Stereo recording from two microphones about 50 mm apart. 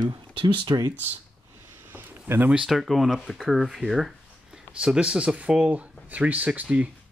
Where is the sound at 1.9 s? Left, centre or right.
Right.